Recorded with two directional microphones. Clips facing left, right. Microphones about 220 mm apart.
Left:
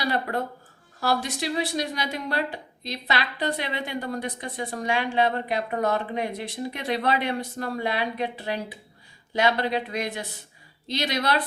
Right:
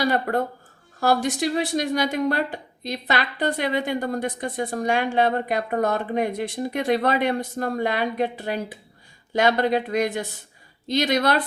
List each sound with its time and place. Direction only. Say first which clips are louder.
0.0 s a woman's voice: right 5 dB; 50° right (ahead or behind)